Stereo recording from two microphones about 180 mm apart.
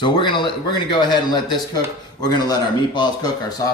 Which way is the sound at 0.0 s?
25° left (ahead or behind).